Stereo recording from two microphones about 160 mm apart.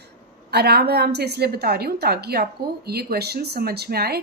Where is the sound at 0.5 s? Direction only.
85° right.